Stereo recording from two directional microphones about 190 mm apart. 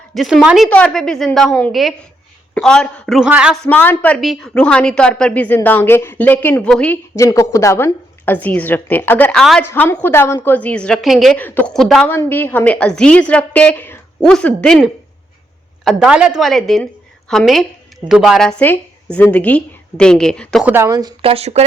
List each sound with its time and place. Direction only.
0.1 s a man's voice: centre (ahead or behind)
20.7 s speech: 15° right (ahead or behind)
21.2 s speech: 30° right (ahead or behind)